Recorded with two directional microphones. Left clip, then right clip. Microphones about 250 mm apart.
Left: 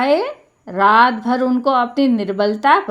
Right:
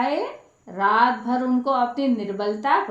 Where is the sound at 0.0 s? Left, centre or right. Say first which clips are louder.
Left 8 dB; left.